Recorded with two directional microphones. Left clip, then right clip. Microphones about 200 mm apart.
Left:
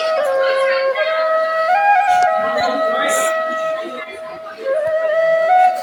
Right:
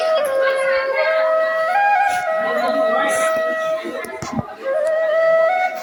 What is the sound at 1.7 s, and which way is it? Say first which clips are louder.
Music: left 4 dB; centre (ahead or behind).